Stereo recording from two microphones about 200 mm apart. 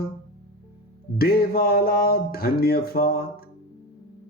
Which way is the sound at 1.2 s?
50° left (ahead or behind).